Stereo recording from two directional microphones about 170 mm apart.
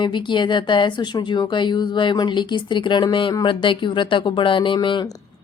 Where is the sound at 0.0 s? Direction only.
30° left (ahead or behind).